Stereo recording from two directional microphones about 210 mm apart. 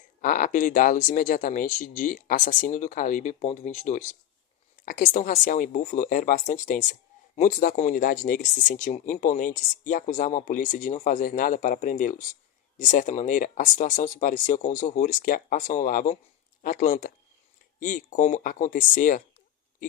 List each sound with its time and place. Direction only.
0.2 s speech: 40° left (ahead or behind)